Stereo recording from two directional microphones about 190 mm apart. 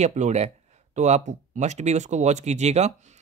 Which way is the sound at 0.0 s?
35° right (ahead or behind).